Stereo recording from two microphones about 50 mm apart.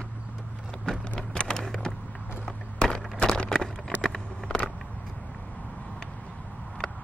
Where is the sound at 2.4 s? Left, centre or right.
Centre.